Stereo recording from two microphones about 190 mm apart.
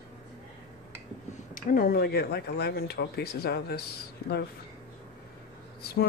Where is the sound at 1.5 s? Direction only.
50° left (ahead or behind).